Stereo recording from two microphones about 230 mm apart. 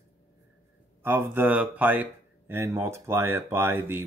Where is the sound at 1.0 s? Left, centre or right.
Centre.